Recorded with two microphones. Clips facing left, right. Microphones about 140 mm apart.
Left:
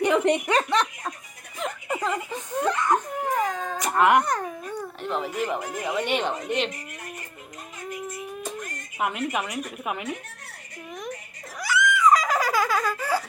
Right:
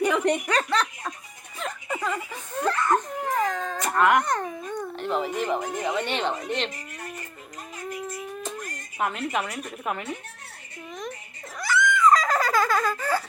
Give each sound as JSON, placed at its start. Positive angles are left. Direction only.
{"t": 0.0, "sound": "a sound", "side_deg": 20}
{"t": 0.4, "sound": "speech", "side_deg": 20}
{"t": 1.5, "sound": "a sound", "side_deg": 15}
{"t": 4.3, "sound": "baby cry", "side_deg": 5}
{"t": 5.8, "sound": "speech", "side_deg": 5}
{"t": 9.0, "sound": "speech", "side_deg": 10}
{"t": 11.5, "sound": "giggle", "side_deg": 10}